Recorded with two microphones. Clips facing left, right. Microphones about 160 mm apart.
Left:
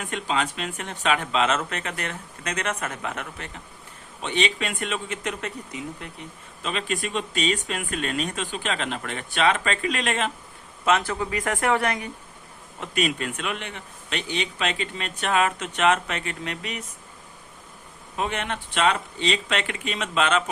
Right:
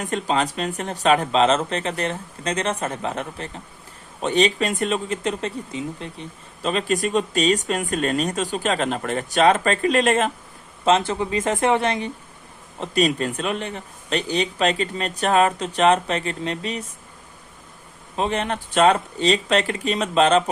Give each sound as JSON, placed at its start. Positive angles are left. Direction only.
{"t": 0.0, "sound": "speech", "side_deg": -40}
{"t": 10.8, "sound": "speech", "side_deg": -25}
{"t": 18.2, "sound": "speech", "side_deg": -35}